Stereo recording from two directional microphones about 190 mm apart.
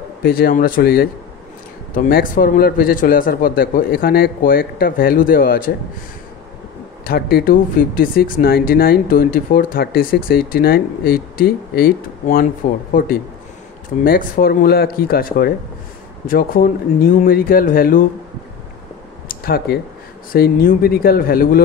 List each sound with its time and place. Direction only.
0.2 s speech: 50° left (ahead or behind)
7.1 s speech: 55° left (ahead or behind)
19.2 s a sound: 55° left (ahead or behind)
20.3 s speech: 50° left (ahead or behind)